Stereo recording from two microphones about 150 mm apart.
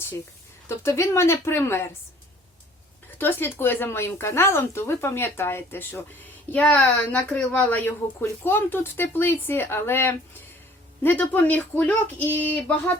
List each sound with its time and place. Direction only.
0.8 s speech: 20° left (ahead or behind)
3.2 s speech: 15° left (ahead or behind)